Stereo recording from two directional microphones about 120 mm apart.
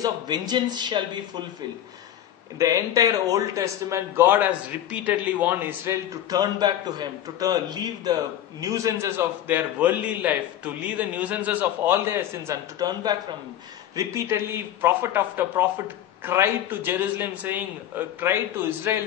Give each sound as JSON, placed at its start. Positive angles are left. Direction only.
{"t": 0.0, "sound": "speech", "side_deg": -35}
{"t": 2.6, "sound": "a man's voice", "side_deg": -25}
{"t": 6.3, "sound": "a man's voice", "side_deg": -35}
{"t": 12.7, "sound": "speech", "side_deg": -35}
{"t": 13.9, "sound": "a man's voice", "side_deg": -25}